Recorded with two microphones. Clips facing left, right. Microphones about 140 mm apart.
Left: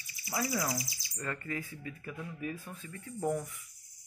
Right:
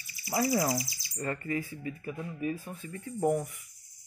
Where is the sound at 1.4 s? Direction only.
10° right (ahead or behind).